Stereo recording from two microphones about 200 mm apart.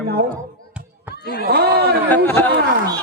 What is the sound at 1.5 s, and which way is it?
Speech, 50° right (ahead or behind).